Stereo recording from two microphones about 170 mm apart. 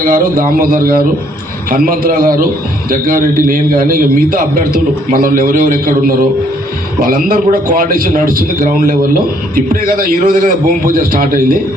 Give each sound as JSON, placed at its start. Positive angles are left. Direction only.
{"t": 0.0, "sound": "a man's voice", "side_deg": -55}